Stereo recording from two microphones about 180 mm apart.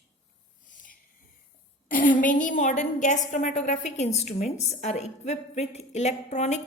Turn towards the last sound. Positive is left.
turn(degrees=40)  # may be behind; listen again after turning